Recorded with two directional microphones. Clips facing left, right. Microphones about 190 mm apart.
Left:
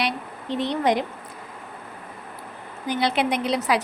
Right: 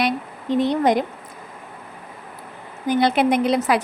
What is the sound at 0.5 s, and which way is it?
Speech, 45° right (ahead or behind).